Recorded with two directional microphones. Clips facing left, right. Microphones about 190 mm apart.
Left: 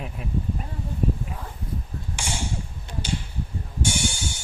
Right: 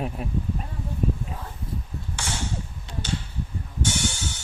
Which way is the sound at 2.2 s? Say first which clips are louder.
Left 1 dB; 10° left (ahead or behind).